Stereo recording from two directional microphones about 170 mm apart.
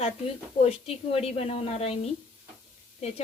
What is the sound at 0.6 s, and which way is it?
A woman's voice, 35° left (ahead or behind).